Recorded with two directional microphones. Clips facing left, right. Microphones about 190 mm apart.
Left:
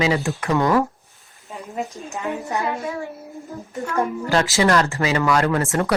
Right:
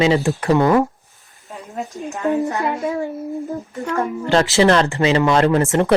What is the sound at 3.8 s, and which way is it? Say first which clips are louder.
Speech: right 1 dB; 30° right (ahead or behind).